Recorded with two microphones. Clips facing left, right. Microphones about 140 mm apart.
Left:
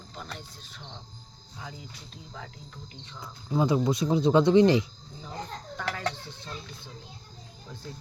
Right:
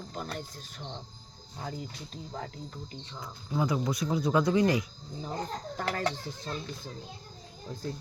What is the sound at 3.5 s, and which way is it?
Speech, 25° left (ahead or behind).